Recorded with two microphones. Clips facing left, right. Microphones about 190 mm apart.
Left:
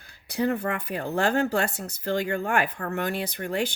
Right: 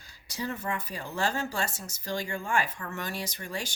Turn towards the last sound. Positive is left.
turn(degrees=60)  # may be behind; listen again after turning